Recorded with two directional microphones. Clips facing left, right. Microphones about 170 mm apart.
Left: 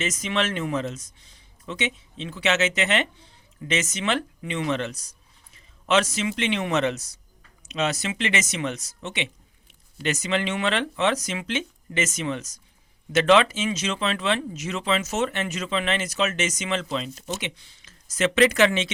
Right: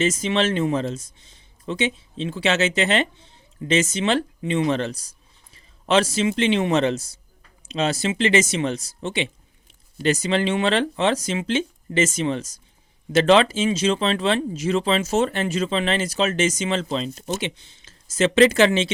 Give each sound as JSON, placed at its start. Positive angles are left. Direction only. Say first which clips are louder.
{"t": 0.0, "sound": "speech", "louder": "right 6 dB", "side_deg": -30}